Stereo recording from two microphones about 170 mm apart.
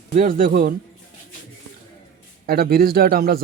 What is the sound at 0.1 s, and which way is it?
Speech, 55° right (ahead or behind).